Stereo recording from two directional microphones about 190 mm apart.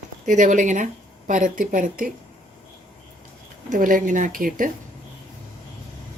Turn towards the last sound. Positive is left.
turn(degrees=-45)  # may be behind; listen again after turning